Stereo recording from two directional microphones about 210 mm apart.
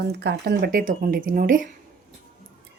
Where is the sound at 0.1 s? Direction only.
50° right (ahead or behind).